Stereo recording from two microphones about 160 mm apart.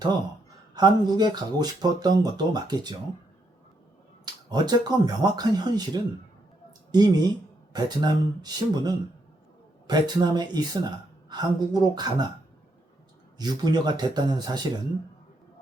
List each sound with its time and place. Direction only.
0.7 s speech: 25° right (ahead or behind)
4.4 s speech: 25° right (ahead or behind)
13.4 s speech: 25° right (ahead or behind)